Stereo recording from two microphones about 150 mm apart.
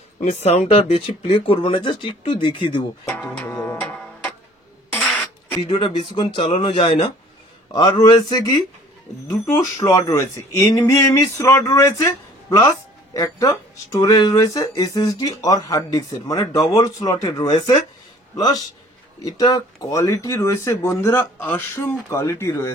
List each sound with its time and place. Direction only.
0.2 s speech: 50° left (ahead or behind)
3.1 s music: 15° left (ahead or behind)
5.0 s a sound: 5° left (ahead or behind)
5.7 s speech: 35° left (ahead or behind)
17.5 s speech: 35° left (ahead or behind)
18.3 s a man's voice: 25° left (ahead or behind)